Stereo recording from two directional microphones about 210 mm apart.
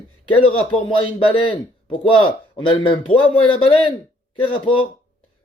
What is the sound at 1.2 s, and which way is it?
Speech, 25° left (ahead or behind).